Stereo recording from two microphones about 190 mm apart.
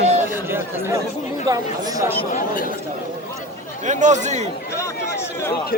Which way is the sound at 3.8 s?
40° right (ahead or behind).